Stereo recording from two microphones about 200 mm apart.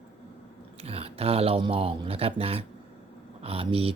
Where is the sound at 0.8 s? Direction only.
30° right (ahead or behind).